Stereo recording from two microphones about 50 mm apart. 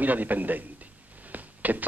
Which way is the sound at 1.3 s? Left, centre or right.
Right.